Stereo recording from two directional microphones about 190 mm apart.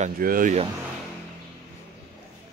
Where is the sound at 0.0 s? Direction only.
45° right (ahead or behind).